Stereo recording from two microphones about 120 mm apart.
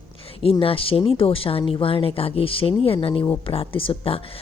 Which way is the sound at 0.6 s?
50° left (ahead or behind).